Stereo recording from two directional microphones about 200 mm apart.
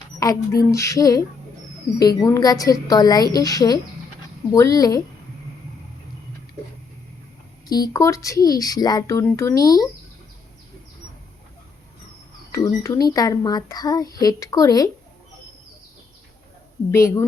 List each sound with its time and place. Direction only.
0.2 s a child's voice: 20° left (ahead or behind)
7.7 s a child's voice: 20° left (ahead or behind)
12.5 s a child's voice: 15° left (ahead or behind)
16.9 s a child's voice: 15° left (ahead or behind)